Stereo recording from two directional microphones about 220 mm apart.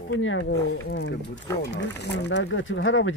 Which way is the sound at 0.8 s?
50° left (ahead or behind).